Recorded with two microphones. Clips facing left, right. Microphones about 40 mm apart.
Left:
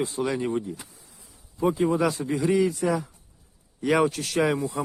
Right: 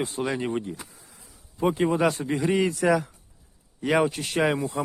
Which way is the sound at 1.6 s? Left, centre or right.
Right.